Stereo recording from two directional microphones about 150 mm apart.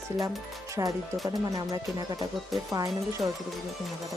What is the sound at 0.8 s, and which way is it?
Speech, 20° right (ahead or behind).